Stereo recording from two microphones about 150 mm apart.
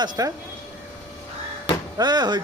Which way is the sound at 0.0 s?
25° right (ahead or behind).